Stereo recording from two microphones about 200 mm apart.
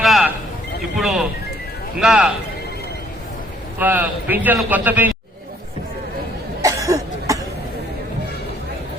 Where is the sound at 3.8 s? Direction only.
10° right (ahead or behind).